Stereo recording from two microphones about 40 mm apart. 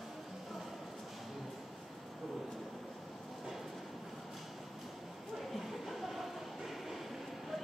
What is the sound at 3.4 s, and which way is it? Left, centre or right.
Train, centre.